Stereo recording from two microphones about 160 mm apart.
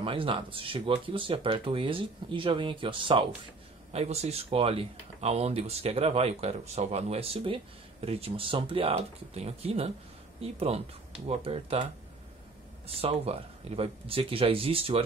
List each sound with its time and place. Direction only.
0.0 s speech: 35° right (ahead or behind)